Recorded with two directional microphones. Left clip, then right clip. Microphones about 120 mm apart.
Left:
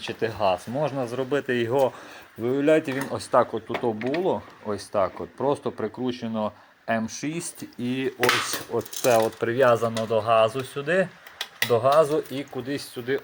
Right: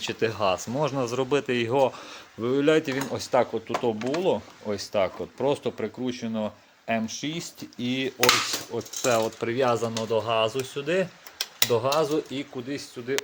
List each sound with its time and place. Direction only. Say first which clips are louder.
0.0 s speech: left 1 dB; 35° right (ahead or behind)
4.2 s speech: even; 30° right (ahead or behind)
6.0 s speech: left 2 dB; 15° right (ahead or behind)
7.8 s speech: left 1 dB; 30° right (ahead or behind)
8.7 s speech: left 4 dB; 5° right (ahead or behind)
12.5 s speech: left 3 dB; 20° left (ahead or behind)